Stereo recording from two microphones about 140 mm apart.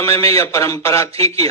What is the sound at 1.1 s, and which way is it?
Speech, 45° right (ahead or behind).